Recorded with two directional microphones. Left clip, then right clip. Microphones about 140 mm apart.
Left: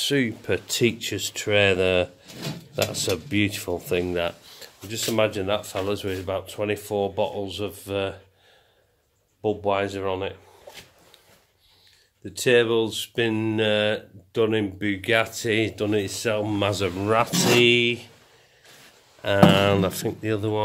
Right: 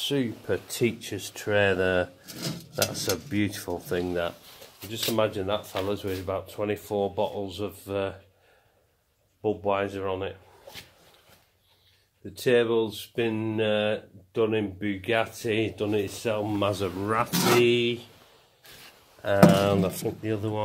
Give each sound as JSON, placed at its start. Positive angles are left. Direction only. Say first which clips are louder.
{"t": 0.0, "sound": "speech", "louder": "left 5 dB", "side_deg": 30}
{"t": 4.8, "sound": "speech", "louder": "left 3 dB", "side_deg": 15}
{"t": 9.4, "sound": "speech", "louder": "left 3 dB", "side_deg": 15}
{"t": 12.4, "sound": "speech", "louder": "left 3 dB", "side_deg": 25}
{"t": 16.5, "sound": "speech", "louder": "left 3 dB", "side_deg": 30}
{"t": 17.6, "sound": "speech", "louder": "left 5 dB", "side_deg": 15}
{"t": 19.2, "sound": "speech", "louder": "left 2 dB", "side_deg": 35}